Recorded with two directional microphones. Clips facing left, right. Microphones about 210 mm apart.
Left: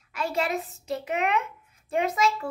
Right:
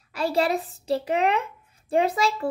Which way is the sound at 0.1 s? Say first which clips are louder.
Right 4 dB; 35° right (ahead or behind).